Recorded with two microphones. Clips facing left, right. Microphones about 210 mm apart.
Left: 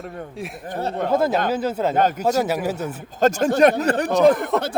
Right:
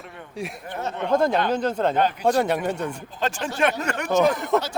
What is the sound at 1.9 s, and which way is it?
Speech, 45° left (ahead or behind).